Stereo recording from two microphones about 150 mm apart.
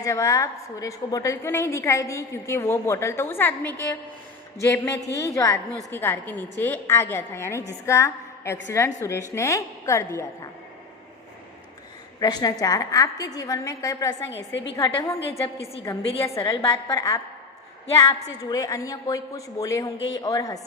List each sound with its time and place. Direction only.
0.0 s a woman's voice: 20° left (ahead or behind)
12.2 s a woman's voice: 25° left (ahead or behind)